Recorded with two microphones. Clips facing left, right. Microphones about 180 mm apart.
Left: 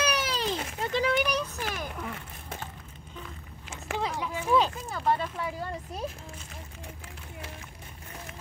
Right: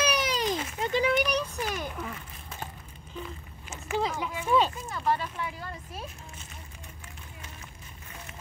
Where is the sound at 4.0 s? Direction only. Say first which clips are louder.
Left 1 dB; centre (ahead or behind).